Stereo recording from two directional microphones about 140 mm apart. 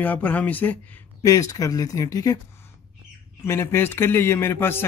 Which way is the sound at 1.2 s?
25° left (ahead or behind).